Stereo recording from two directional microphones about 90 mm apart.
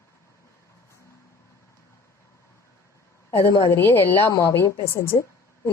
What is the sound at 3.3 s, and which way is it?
A woman's voice, 25° left (ahead or behind).